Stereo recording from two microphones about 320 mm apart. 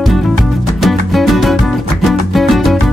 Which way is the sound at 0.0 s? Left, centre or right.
Centre.